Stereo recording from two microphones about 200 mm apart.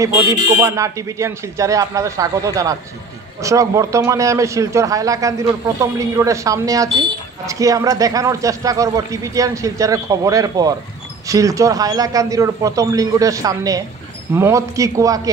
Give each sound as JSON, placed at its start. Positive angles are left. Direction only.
{"t": 0.6, "sound": "a man's voice", "side_deg": -15}